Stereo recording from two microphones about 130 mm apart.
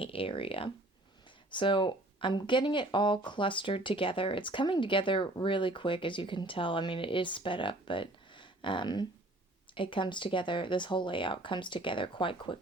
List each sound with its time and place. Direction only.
0.0 s speech: 45° left (ahead or behind)